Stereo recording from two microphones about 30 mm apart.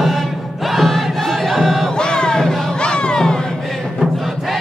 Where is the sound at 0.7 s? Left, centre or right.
Centre.